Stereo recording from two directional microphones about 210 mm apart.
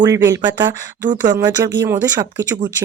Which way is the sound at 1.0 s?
40° right (ahead or behind).